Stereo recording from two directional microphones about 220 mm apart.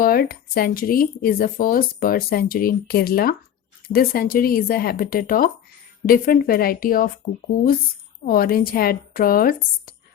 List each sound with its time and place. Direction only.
0.0 s speech: 40° left (ahead or behind)
8.2 s speech: 40° left (ahead or behind)